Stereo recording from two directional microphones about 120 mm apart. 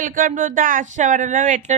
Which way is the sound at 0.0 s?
90° right.